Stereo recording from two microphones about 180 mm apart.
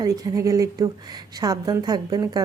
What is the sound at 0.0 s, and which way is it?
A woman's voice, 20° right (ahead or behind).